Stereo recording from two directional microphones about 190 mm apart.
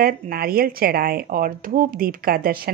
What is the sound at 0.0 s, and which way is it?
Speech, 50° right (ahead or behind).